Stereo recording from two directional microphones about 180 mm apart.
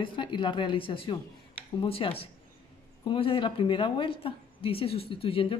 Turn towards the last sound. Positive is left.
turn(degrees=30)  # may be behind; listen again after turning